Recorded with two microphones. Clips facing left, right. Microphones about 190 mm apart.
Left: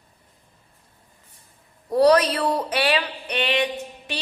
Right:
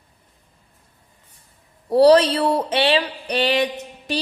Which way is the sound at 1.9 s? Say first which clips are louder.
Right 4 dB; 30° right (ahead or behind).